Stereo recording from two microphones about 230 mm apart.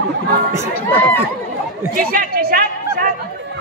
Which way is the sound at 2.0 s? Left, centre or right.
Right.